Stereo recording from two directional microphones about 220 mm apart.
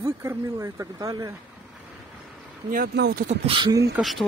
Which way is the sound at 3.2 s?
25° right (ahead or behind).